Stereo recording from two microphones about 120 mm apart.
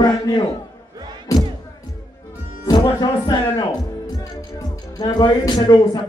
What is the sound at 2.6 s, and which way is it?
Speech, 35° left (ahead or behind).